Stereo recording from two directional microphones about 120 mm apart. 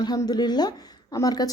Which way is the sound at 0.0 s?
35° left (ahead or behind).